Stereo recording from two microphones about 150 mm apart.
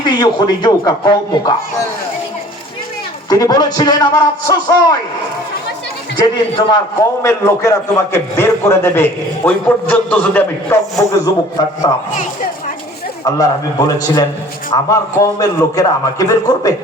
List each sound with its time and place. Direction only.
0.0 s a man's voice: 30° left (ahead or behind)
3.2 s a man's voice: 25° left (ahead or behind)
6.1 s a man's voice: 30° left (ahead or behind)
7.2 s a man's voice: 20° left (ahead or behind)
13.2 s a man's voice: 25° left (ahead or behind)